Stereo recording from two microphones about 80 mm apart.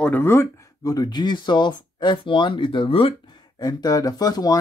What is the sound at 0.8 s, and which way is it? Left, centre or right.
Speech, left.